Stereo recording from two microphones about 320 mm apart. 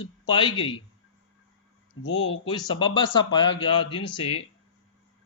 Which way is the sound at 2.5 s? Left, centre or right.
Centre.